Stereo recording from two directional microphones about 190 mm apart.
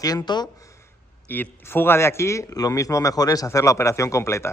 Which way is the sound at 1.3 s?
10° left (ahead or behind).